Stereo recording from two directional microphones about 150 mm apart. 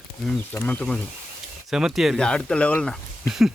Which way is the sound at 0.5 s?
10° left (ahead or behind).